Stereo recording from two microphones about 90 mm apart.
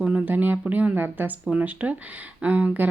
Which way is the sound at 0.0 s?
10° right (ahead or behind).